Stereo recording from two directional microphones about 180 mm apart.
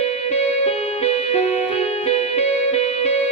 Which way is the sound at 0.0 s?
35° left (ahead or behind).